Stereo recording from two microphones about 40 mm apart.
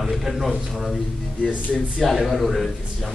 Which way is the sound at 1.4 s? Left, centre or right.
Right.